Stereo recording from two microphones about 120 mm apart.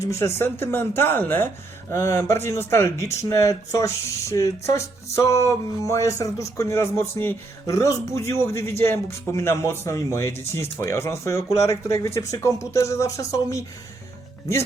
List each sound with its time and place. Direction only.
0.0 s speech: 25° left (ahead or behind)